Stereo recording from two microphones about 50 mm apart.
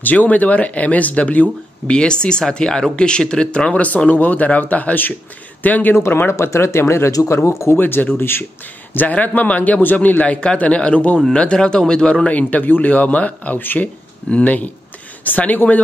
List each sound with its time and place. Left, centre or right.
0.0 s speech: left
5.9 s speech: left
7.8 s speech: left
8.9 s speech: left; by 12.3 s centre
12.3 s speech: left